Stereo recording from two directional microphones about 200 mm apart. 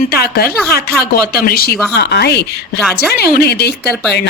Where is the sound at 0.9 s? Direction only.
50° left (ahead or behind).